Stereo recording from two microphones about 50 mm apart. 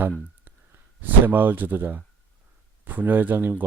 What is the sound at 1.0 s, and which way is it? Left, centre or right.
A man's voice, right.